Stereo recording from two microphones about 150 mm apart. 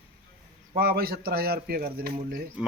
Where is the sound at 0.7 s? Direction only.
90° right.